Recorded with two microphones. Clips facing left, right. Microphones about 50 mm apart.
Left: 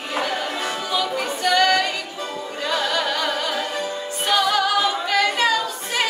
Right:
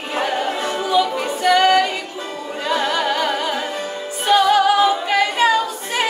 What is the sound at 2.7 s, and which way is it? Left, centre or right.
Carnatic music, centre.